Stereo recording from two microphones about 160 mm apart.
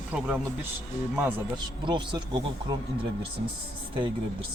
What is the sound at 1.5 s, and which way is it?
Speech, 30° right (ahead or behind).